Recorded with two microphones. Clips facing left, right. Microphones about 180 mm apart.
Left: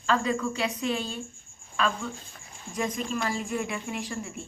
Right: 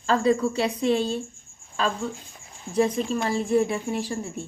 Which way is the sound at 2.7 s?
30° right (ahead or behind).